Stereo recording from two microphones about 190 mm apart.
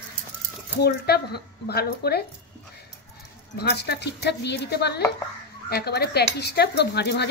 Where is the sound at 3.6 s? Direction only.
60° left (ahead or behind).